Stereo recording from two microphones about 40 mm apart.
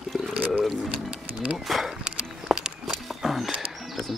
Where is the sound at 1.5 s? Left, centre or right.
Centre.